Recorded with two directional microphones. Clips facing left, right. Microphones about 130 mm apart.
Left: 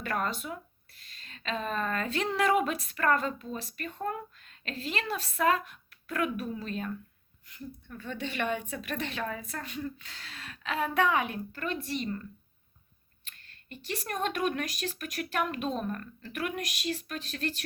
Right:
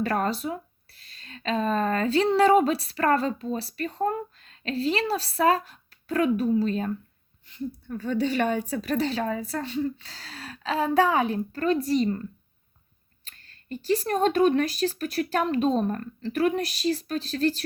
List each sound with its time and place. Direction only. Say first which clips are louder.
0.0 s speech: right 7 dB; 35° right (ahead or behind)
13.2 s speech: right 10 dB; 35° right (ahead or behind)